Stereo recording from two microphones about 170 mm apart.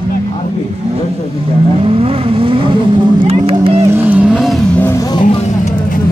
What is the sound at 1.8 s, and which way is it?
Vehicle, 35° right (ahead or behind).